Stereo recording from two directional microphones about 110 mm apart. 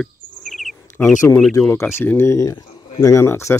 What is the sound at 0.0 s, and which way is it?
Chirp, centre (ahead or behind).